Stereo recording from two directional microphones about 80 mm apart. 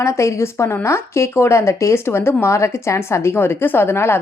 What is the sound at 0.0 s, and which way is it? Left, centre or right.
A woman's voice, left.